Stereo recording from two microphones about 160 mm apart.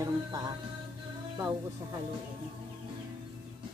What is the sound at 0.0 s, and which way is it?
Music, 25° right (ahead or behind).